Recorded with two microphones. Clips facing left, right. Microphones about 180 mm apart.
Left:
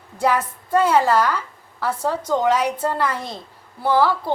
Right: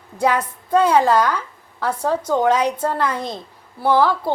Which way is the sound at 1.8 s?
10° right (ahead or behind).